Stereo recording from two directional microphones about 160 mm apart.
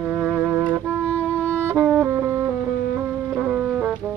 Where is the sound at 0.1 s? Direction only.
10° right (ahead or behind).